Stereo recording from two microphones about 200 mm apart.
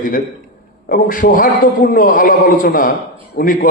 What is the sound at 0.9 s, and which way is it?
A man's voice, 45° left (ahead or behind).